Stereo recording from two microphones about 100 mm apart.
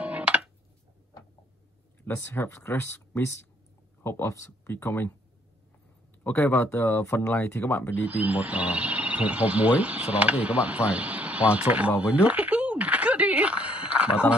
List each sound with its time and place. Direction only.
0.0 s a sound: 10° right (ahead or behind)
2.0 s speech: 20° left (ahead or behind)
6.2 s speech: 20° left (ahead or behind)
8.1 s speech: 15° right (ahead or behind)